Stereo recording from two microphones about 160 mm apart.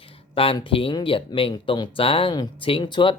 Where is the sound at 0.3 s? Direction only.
35° left (ahead or behind).